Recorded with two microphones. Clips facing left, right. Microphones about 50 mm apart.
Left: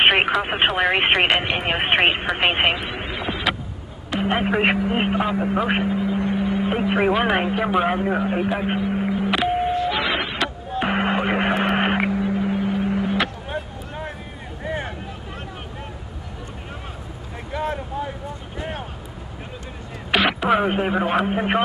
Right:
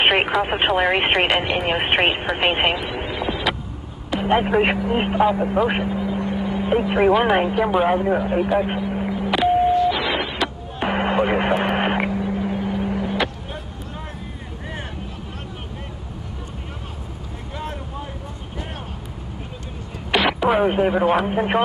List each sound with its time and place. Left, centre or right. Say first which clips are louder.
0.0 s radio: left 1 dB; centre
0.4 s speech: right 1 dB; centre
4.2 s vehicle: right 2 dB; centre
20.1 s speech: even; centre